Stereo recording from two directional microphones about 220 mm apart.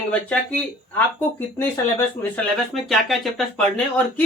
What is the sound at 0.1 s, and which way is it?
Speech, 5° left (ahead or behind).